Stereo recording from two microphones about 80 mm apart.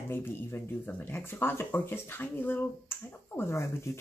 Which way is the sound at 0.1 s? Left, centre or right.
Left.